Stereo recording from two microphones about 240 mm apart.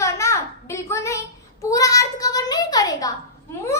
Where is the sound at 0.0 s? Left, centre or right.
Centre.